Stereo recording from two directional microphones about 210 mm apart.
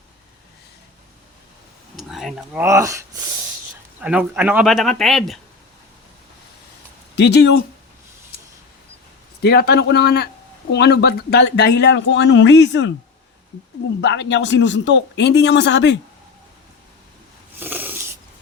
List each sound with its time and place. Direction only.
2.0 s a sound: centre (ahead or behind)
2.6 s speech: 15° right (ahead or behind)
4.0 s speech: 5° right (ahead or behind)
7.2 s speech: 55° left (ahead or behind)
9.4 s speech: 50° left (ahead or behind)
14.0 s speech: 60° left (ahead or behind)
17.6 s a sound: 10° right (ahead or behind)